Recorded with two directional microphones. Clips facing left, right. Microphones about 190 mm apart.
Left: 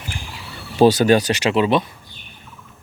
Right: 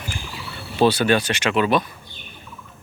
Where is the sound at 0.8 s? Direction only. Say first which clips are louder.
Left 4 dB; 40° left (ahead or behind).